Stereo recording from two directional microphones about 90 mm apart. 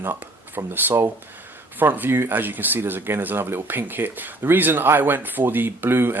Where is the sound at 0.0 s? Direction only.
20° right (ahead or behind).